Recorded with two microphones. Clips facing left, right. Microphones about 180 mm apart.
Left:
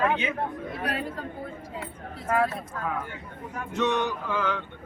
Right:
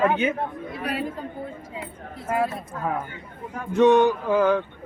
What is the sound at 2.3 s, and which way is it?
Speech, 10° right (ahead or behind).